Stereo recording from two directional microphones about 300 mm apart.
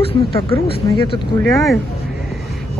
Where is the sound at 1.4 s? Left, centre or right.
Centre.